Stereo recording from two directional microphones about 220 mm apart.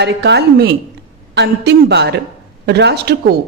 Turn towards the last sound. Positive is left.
turn(degrees=-45)  # may be behind; listen again after turning